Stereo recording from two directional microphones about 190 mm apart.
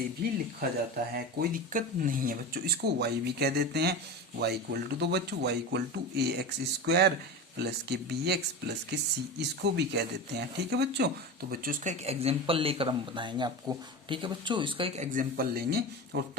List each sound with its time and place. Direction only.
0.2 s speech: 55° right (ahead or behind)
11.6 s speech: 45° right (ahead or behind)